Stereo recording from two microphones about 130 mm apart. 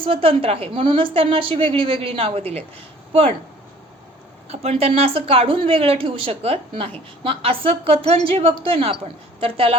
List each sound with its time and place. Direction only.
0.0 s speech: 45° right (ahead or behind)
4.4 s speech: 50° right (ahead or behind)